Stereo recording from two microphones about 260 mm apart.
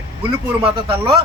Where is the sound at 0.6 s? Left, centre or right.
Centre.